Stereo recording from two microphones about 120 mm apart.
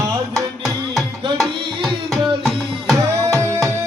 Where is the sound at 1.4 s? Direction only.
5° left (ahead or behind).